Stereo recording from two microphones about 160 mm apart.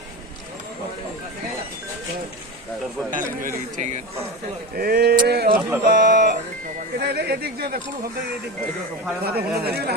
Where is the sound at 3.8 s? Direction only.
50° right (ahead or behind).